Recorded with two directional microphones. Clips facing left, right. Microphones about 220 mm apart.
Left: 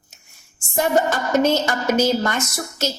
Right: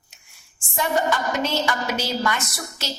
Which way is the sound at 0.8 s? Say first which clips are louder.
Left 4 dB; 45° left (ahead or behind).